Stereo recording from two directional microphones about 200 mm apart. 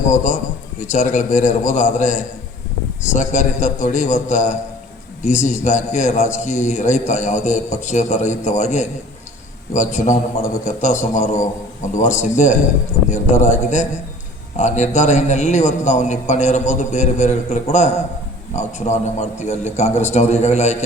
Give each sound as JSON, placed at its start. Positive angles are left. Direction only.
{"t": 0.1, "sound": "a man's voice", "side_deg": 40}